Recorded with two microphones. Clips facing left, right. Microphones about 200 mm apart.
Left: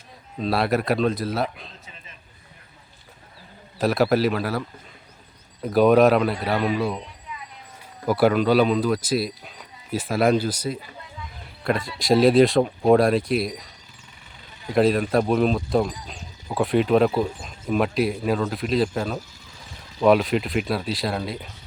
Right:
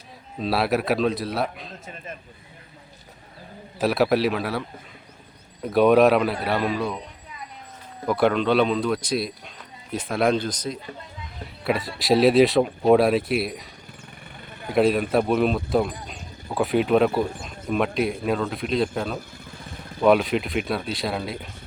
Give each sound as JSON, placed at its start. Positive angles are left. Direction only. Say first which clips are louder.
{"t": 0.3, "sound": "speech", "louder": "left 1 dB", "side_deg": 0}
{"t": 3.8, "sound": "speech", "louder": "left 1 dB", "side_deg": 0}
{"t": 5.6, "sound": "speech", "louder": "even", "side_deg": 0}
{"t": 7.3, "sound": "a sound", "louder": "left 4 dB", "side_deg": -40}
{"t": 8.0, "sound": "speech", "louder": "left 2 dB", "side_deg": 5}
{"t": 11.6, "sound": "speech", "louder": "even", "side_deg": -5}
{"t": 14.3, "sound": "vehicle", "louder": "right 1 dB", "side_deg": -55}
{"t": 14.8, "sound": "speech", "louder": "even", "side_deg": 0}
{"t": 19.5, "sound": "vehicle", "louder": "right 6 dB", "side_deg": -55}
{"t": 20.0, "sound": "speech", "louder": "left 1 dB", "side_deg": 0}